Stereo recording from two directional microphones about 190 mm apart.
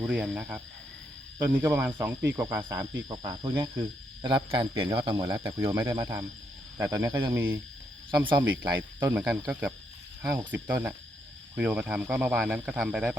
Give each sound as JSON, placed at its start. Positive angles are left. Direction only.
{"t": 0.0, "sound": "speech", "side_deg": -5}
{"t": 8.1, "sound": "speech", "side_deg": -25}
{"t": 9.0, "sound": "speech", "side_deg": -10}